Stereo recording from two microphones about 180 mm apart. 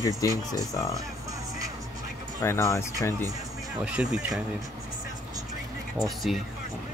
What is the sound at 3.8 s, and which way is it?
Speech, 5° right (ahead or behind).